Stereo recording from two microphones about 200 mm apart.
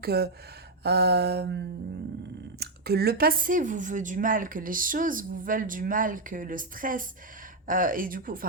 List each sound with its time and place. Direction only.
0.0 s speech: 50° right (ahead or behind)
0.9 s a sound: 55° right (ahead or behind)
2.6 s speech: 50° right (ahead or behind)